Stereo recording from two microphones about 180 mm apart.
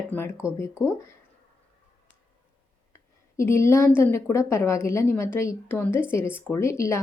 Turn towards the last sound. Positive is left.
turn(degrees=15)  # may be behind; listen again after turning